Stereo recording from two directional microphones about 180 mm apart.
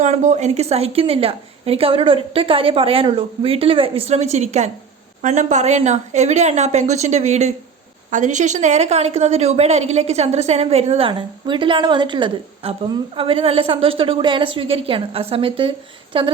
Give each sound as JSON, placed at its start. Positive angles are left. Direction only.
{"t": 0.0, "sound": "a woman's voice", "side_deg": -40}